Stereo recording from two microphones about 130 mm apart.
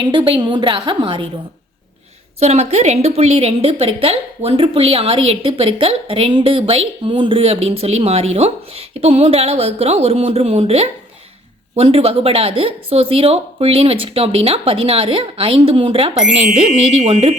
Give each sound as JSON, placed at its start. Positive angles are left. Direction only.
{"t": 0.0, "sound": "a woman's voice", "side_deg": -40}
{"t": 2.4, "sound": "a woman's voice", "side_deg": -55}